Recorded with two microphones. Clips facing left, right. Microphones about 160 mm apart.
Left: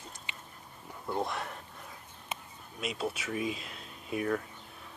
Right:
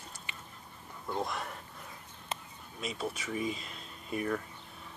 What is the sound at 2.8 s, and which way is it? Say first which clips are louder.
Speech: left 2 dB; 5° left (ahead or behind).